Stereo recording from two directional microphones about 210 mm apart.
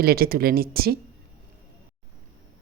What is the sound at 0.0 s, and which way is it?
Speech, 45° right (ahead or behind).